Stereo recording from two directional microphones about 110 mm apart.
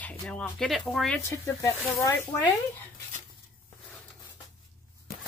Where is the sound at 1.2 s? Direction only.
25° left (ahead or behind).